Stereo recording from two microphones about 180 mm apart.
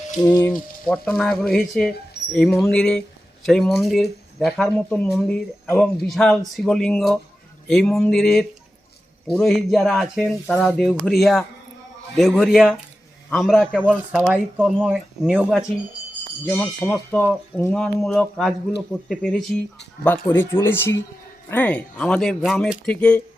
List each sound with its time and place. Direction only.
0.2 s frying: 20° left (ahead or behind)
0.9 s speech: centre (ahead or behind)
14.1 s speech: 10° right (ahead or behind)
16.5 s speech: 5° left (ahead or behind)